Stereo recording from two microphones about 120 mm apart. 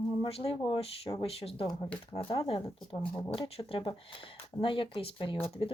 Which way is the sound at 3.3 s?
55° left (ahead or behind).